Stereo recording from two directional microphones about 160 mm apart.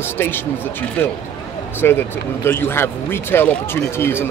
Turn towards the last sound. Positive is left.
turn(degrees=15)  # may be behind; listen again after turning